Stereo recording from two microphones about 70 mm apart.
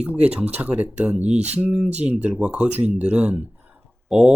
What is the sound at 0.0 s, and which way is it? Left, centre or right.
Speech, right.